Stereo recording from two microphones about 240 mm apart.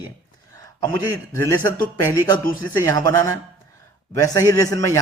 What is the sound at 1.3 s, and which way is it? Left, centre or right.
A man's voice, centre.